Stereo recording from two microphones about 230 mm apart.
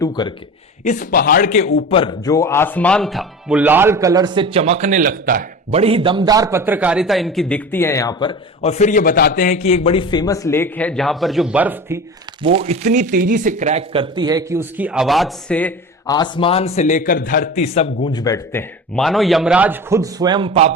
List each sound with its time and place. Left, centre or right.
0.0 s speech: centre
0.9 s a man's voice: left; by 12.0 s centre
12.4 s speech: right; by 16.1 s centre
16.1 s a man's voice: centre
18.9 s a man's voice: centre; by 20.7 s right